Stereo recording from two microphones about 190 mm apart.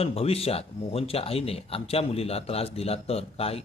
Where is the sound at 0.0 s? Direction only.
30° left (ahead or behind).